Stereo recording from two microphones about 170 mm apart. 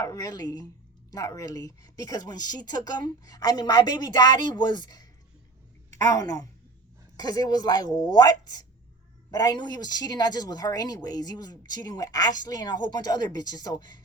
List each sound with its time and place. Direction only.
0.0 s speech: 20° left (ahead or behind)
6.1 s speech: 20° left (ahead or behind)